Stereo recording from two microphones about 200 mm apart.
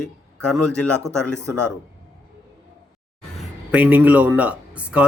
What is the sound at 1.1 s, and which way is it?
Speech, 5° left (ahead or behind).